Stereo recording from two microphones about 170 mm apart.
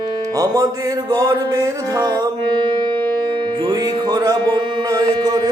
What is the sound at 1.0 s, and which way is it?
Music, 20° right (ahead or behind).